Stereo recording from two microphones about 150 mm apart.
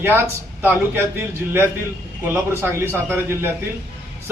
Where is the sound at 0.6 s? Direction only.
15° right (ahead or behind).